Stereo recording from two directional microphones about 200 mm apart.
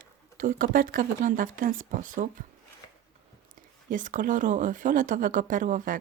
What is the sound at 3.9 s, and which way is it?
Speech, 40° right (ahead or behind).